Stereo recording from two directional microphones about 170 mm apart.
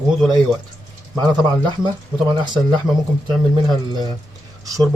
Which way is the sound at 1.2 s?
25° right (ahead or behind).